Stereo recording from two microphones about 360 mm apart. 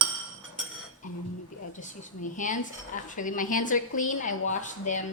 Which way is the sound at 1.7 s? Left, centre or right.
Left.